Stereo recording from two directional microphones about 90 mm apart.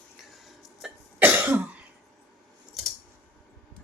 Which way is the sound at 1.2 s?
20° right (ahead or behind).